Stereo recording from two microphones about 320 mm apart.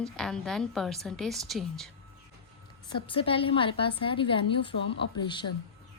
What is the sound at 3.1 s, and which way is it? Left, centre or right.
Speech, centre.